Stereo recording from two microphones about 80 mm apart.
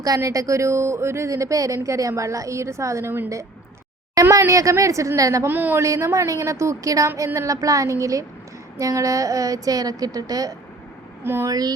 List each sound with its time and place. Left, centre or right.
0.0 s speech: right
5.5 s speech: right
5.8 s speech: right
11.2 s speech: right
11.4 s speech: right